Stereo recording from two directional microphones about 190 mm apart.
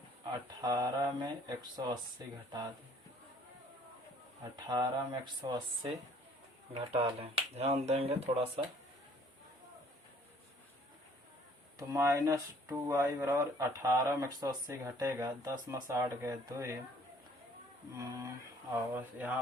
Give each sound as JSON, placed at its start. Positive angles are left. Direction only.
{"t": 0.6, "sound": "speech", "side_deg": -20}
{"t": 4.6, "sound": "speech", "side_deg": -20}
{"t": 11.8, "sound": "speech", "side_deg": -15}
{"t": 17.9, "sound": "speech", "side_deg": -15}